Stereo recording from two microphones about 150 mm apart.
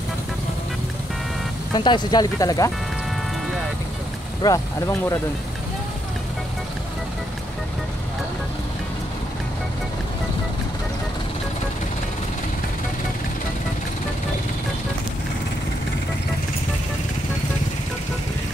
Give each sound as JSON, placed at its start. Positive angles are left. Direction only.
{"t": 1.7, "sound": "speech", "side_deg": 30}
{"t": 4.4, "sound": "speech", "side_deg": 20}